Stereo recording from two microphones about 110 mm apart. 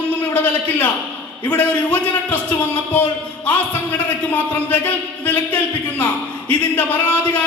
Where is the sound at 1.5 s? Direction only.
15° left (ahead or behind).